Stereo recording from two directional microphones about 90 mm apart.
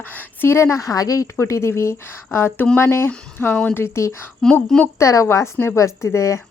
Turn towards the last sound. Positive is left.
turn(degrees=35)  # may be behind; listen again after turning